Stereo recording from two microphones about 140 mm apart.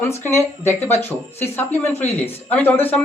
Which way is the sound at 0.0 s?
20° left (ahead or behind).